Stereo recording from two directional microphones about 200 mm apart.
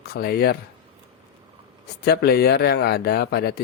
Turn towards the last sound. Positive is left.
turn(degrees=50)  # may be behind; listen again after turning